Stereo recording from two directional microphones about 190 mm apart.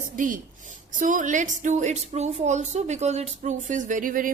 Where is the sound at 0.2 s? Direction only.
45° right (ahead or behind).